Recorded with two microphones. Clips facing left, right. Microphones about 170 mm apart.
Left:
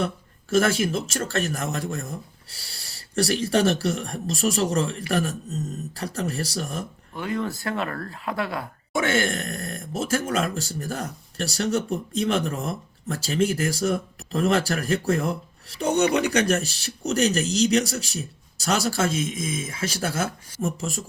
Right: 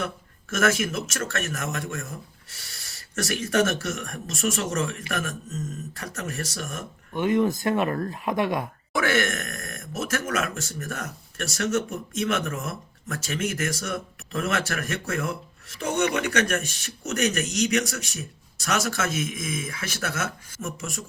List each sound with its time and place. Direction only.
0.5 s speech: 30° left (ahead or behind)
7.1 s speech: 20° right (ahead or behind)
8.9 s speech: 25° left (ahead or behind)